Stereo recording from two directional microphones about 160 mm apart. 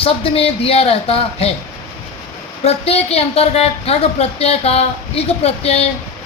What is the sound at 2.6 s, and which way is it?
A woman's voice, 40° left (ahead or behind).